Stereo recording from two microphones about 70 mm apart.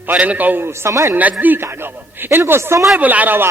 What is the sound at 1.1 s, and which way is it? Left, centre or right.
Speech, right.